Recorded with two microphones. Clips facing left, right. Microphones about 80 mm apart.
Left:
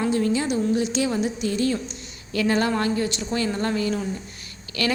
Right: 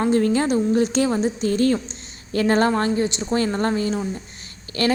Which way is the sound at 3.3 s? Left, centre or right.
Right.